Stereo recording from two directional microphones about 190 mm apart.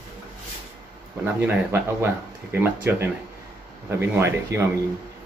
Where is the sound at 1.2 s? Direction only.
10° right (ahead or behind).